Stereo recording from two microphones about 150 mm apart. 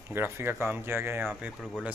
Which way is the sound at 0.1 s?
15° right (ahead or behind).